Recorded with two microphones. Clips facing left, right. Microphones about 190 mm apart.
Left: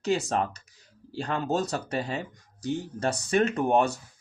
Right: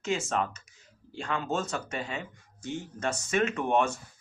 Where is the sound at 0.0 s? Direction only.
35° left (ahead or behind).